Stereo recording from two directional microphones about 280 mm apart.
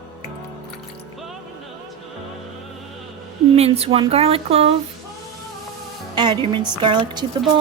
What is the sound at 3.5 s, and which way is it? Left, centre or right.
Speech, right.